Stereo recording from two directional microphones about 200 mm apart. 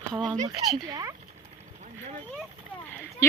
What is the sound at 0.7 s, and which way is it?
Speech, 20° right (ahead or behind).